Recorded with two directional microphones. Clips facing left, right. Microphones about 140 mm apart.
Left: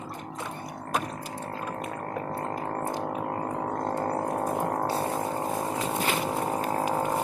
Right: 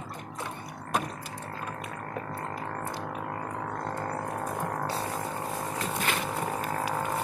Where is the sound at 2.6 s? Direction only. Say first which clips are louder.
Left 5 dB; 35° left (ahead or behind).